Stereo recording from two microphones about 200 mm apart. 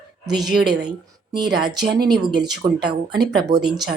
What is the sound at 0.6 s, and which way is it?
A woman's voice, 20° right (ahead or behind).